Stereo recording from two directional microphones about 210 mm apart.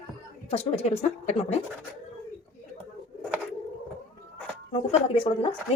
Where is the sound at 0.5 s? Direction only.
30° left (ahead or behind).